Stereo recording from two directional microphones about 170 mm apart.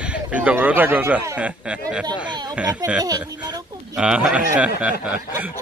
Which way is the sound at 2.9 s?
20° right (ahead or behind).